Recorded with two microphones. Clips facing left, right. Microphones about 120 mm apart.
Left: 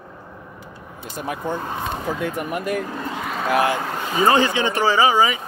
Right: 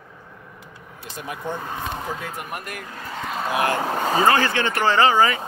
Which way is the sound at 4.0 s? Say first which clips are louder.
Right 2 dB; 40° right (ahead or behind).